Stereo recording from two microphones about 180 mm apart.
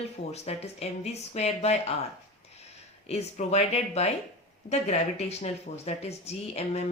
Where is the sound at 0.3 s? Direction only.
35° left (ahead or behind).